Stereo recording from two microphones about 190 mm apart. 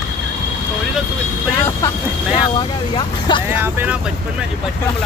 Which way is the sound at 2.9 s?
25° left (ahead or behind).